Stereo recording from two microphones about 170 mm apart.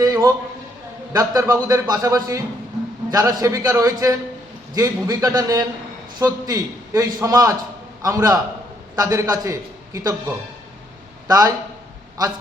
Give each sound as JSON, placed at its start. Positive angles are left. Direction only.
{"t": 0.0, "sound": "a man's voice", "side_deg": -20}